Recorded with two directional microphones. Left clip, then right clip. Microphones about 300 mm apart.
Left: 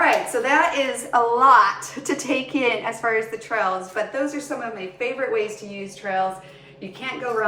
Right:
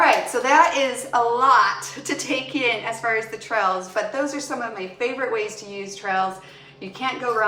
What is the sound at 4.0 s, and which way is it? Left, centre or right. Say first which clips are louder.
Speech: right 1 dB; centre.